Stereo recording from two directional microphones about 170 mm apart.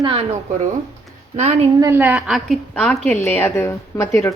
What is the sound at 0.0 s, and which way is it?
Speech, 30° right (ahead or behind).